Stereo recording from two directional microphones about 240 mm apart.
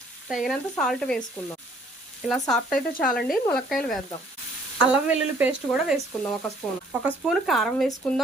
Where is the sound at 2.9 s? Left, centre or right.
Left.